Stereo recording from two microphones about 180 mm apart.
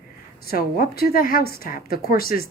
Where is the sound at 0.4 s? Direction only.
55° left (ahead or behind).